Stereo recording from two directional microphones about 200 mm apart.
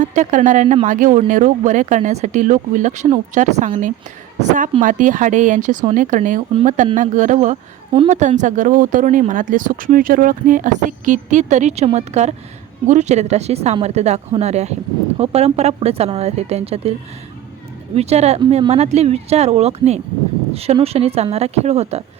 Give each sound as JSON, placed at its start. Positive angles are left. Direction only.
{"t": 0.0, "sound": "speech", "side_deg": -40}
{"t": 17.9, "sound": "speech", "side_deg": -30}